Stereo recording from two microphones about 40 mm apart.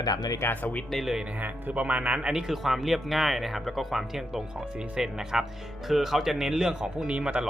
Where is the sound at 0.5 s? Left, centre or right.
Left.